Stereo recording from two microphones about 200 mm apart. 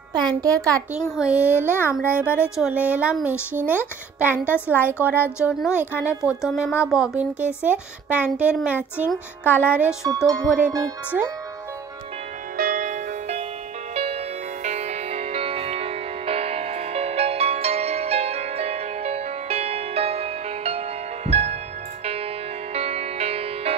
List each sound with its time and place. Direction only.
0.1 s a woman's voice: 20° right (ahead or behind)
1.1 s a woman's voice: 5° right (ahead or behind)
10.0 s a woman's voice: 20° right (ahead or behind)
12.5 s music: 45° right (ahead or behind)